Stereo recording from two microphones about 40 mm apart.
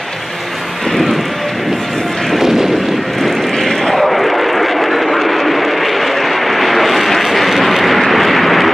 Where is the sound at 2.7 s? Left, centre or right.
Centre.